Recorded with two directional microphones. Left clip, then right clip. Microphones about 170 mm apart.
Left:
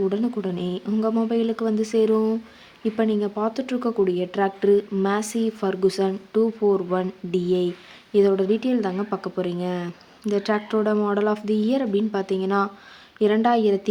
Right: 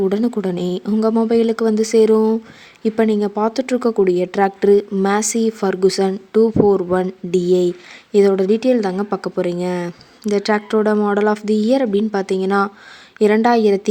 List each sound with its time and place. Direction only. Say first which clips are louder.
0.0 s speech: right 6 dB; 35° right (ahead or behind)